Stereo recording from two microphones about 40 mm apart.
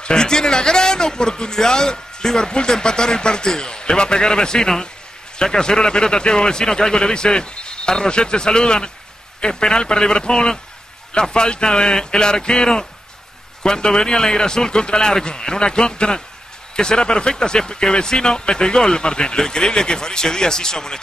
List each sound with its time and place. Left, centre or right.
0.0 s a man's voice: centre